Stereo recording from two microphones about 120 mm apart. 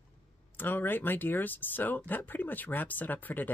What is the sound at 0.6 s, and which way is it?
Speech, 15° left (ahead or behind).